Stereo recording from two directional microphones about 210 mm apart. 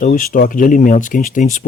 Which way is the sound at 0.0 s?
40° left (ahead or behind).